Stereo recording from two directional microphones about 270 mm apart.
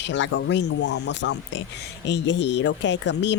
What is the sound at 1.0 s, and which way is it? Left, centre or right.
Speech, left.